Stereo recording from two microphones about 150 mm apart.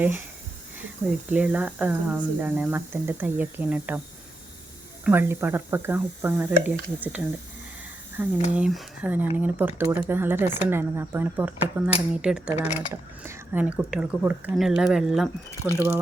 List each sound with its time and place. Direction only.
0.0 s speech: 10° right (ahead or behind)
1.3 s speech: 10° right (ahead or behind)
5.0 s speech: 15° right (ahead or behind)
12.6 s speech: 15° right (ahead or behind)
15.6 s speech: 15° right (ahead or behind)